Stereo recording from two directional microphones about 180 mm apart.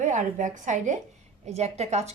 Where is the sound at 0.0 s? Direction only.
45° right (ahead or behind).